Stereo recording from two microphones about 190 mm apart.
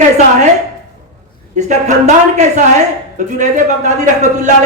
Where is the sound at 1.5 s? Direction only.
40° right (ahead or behind).